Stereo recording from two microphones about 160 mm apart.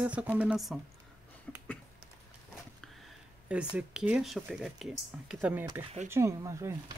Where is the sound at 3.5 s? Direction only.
5° right (ahead or behind).